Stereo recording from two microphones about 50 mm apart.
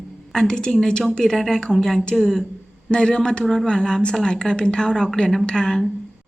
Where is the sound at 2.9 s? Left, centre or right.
Centre.